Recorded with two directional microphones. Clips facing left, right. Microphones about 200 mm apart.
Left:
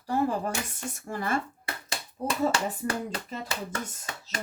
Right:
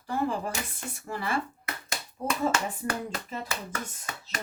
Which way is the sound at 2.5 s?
30° left (ahead or behind).